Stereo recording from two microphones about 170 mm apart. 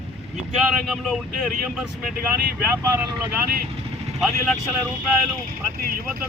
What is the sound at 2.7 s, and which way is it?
Speech, 15° right (ahead or behind).